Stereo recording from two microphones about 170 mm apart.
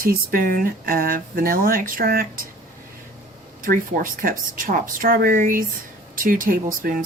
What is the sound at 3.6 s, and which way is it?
Speech, 55° right (ahead or behind).